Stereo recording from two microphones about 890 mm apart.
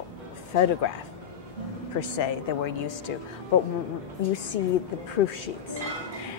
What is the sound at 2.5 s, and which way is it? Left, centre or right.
Speech, left.